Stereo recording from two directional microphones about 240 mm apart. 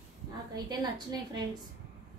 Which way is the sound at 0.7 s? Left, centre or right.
Centre.